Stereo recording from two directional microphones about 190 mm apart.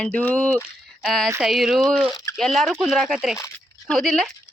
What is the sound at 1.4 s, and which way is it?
Speech, centre (ahead or behind).